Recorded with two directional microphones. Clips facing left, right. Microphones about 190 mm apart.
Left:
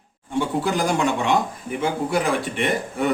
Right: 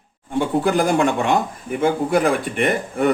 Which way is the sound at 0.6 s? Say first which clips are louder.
Right 6 dB; 55° right (ahead or behind).